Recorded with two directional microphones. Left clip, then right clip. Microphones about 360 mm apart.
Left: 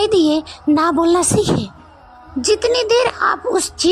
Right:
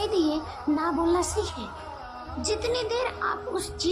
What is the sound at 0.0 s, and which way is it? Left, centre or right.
A woman's voice, centre.